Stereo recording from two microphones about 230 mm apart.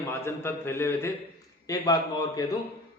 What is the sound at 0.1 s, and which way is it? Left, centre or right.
A man's voice, centre.